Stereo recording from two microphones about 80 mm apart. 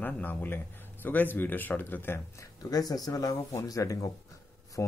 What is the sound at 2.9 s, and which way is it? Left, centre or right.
Speech, left.